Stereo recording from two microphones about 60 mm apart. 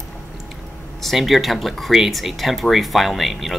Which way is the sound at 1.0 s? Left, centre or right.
Centre.